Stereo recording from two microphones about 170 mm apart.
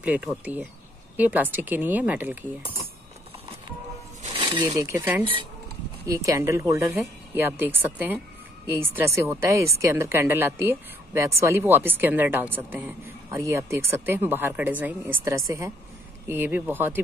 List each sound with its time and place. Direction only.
0.0 s speech: 10° right (ahead or behind)
4.3 s speech: 30° right (ahead or behind); by 17.0 s 10° right (ahead or behind)